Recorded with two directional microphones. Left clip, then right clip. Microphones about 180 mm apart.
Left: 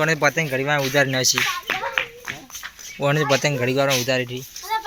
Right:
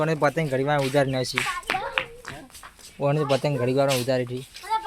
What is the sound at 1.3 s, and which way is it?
Clapping, 40° left (ahead or behind).